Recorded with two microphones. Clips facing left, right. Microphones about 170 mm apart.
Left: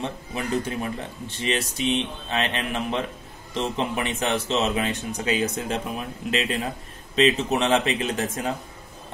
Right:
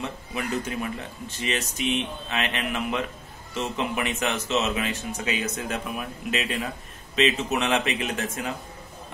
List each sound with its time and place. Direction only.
0.0 s speech: 30° left (ahead or behind)